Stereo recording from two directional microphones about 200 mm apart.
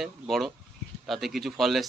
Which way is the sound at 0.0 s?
Centre (ahead or behind).